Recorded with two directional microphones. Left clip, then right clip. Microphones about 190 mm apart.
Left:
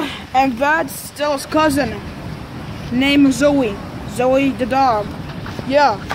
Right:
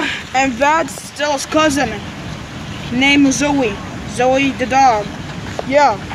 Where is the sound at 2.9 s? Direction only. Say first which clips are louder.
Right 2 dB; 10° left (ahead or behind).